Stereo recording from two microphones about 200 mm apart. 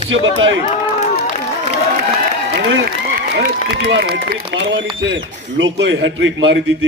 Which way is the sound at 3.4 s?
55° right (ahead or behind).